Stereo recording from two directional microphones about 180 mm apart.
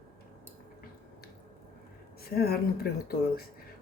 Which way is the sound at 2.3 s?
60° left (ahead or behind).